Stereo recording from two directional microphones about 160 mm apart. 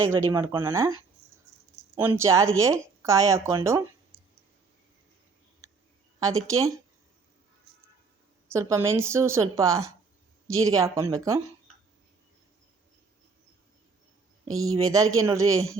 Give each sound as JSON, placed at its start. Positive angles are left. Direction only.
{"t": 0.1, "sound": "speech", "side_deg": -15}
{"t": 2.0, "sound": "speech", "side_deg": -15}
{"t": 4.1, "sound": "clicking", "side_deg": -90}
{"t": 6.1, "sound": "speech", "side_deg": -20}
{"t": 8.5, "sound": "speech", "side_deg": -15}
{"t": 14.6, "sound": "speech", "side_deg": -20}